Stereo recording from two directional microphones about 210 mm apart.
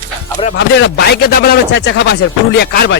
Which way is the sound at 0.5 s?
55° left (ahead or behind).